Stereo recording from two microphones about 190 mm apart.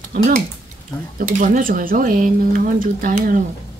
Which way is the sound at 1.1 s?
45° right (ahead or behind).